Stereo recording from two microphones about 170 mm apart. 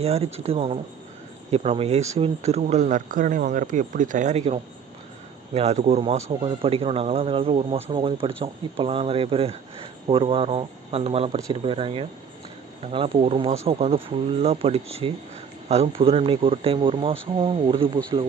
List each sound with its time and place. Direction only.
0.0 s speech: 35° right (ahead or behind)